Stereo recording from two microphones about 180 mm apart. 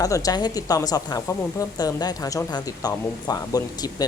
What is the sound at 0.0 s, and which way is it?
A woman's voice, 20° left (ahead or behind).